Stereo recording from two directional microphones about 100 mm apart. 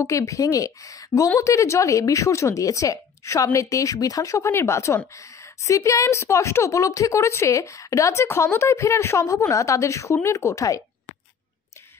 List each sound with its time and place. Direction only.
0.0 s a woman's voice: 35° left (ahead or behind)